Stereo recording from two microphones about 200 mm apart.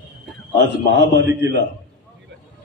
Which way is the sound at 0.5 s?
60° right (ahead or behind).